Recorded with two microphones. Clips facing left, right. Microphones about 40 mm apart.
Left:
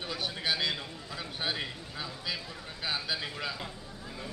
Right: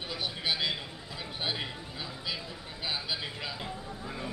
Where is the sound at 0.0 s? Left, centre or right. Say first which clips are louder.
Even; centre.